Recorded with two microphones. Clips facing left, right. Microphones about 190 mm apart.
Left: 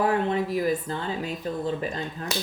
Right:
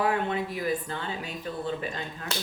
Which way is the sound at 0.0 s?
40° left (ahead or behind).